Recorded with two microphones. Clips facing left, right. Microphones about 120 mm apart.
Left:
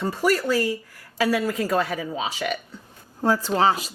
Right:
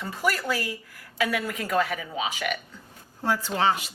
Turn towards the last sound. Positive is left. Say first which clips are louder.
# left 4 dB
turn(degrees=35)  # may be behind; listen again after turning